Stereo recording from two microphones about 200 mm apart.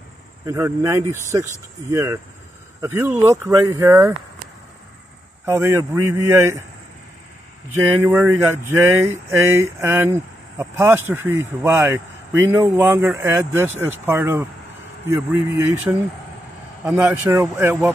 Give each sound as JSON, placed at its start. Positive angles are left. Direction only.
{"t": 0.5, "sound": "speech", "side_deg": -10}
{"t": 5.4, "sound": "speech", "side_deg": -15}
{"t": 7.7, "sound": "speech", "side_deg": -10}